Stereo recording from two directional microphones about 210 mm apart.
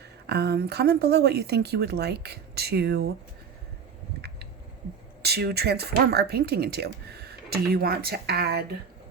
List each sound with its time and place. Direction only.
0.3 s speech: 50° right (ahead or behind)
5.2 s speech: 50° right (ahead or behind)